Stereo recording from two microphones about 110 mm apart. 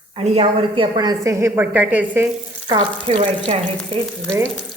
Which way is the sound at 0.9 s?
35° right (ahead or behind).